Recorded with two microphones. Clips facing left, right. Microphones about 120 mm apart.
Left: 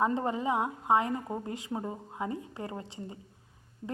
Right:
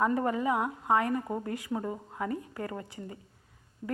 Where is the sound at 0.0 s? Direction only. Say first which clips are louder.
Right 1 dB; 20° left (ahead or behind).